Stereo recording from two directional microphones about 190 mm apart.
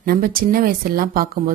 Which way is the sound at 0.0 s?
50° right (ahead or behind).